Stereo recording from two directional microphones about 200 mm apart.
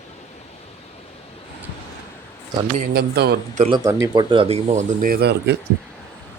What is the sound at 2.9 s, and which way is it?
Speech, 50° right (ahead or behind).